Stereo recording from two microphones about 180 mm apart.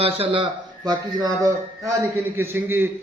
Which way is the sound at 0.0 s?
30° right (ahead or behind).